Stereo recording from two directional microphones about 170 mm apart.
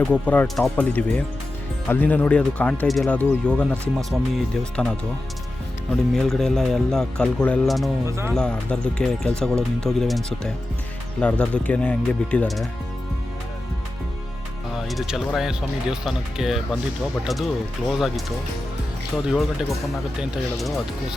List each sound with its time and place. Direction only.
0.0 s speech: 10° left (ahead or behind)
6.1 s speech: 5° left (ahead or behind)
8.0 s speech: 15° right (ahead or behind)
8.4 s speech: 5° left (ahead or behind)
14.8 s speech: centre (ahead or behind)